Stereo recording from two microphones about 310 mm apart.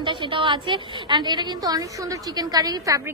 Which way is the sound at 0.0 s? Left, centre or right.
Centre.